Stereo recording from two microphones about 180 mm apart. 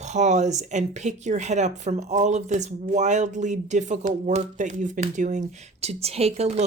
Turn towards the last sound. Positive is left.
turn(degrees=-35)  # may be behind; listen again after turning